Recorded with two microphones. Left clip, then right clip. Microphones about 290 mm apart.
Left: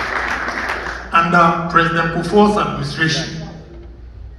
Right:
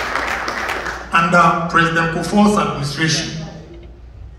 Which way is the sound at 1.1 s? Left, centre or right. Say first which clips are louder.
Even; centre.